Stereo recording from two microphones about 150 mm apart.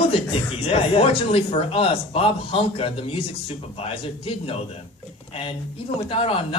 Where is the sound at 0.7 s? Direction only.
40° left (ahead or behind).